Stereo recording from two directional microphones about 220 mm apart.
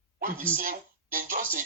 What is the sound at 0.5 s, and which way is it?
Speech, 40° right (ahead or behind).